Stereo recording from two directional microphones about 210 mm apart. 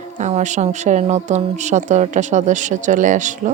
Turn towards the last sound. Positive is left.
turn(degrees=-35)  # may be behind; listen again after turning